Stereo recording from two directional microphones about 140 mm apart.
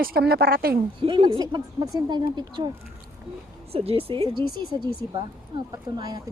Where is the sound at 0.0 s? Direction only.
90° right.